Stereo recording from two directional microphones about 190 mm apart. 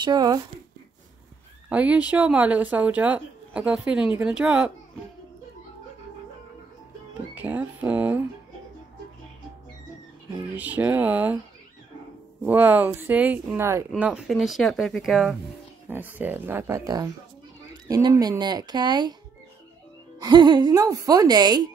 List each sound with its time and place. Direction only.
0.0 s speech: 20° right (ahead or behind)
1.7 s speech: 5° right (ahead or behind)
7.3 s speech: 10° right (ahead or behind)
10.5 s speech: 10° right (ahead or behind)
12.4 s speech: 10° right (ahead or behind)
20.2 s speech: 20° right (ahead or behind)